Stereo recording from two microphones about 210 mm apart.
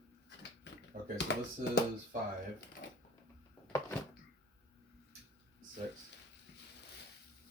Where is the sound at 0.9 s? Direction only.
35° right (ahead or behind).